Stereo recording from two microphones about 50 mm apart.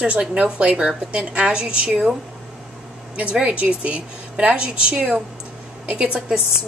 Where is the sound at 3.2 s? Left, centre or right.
Right.